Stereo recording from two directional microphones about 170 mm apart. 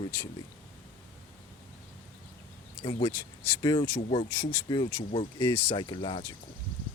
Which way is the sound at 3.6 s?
20° left (ahead or behind).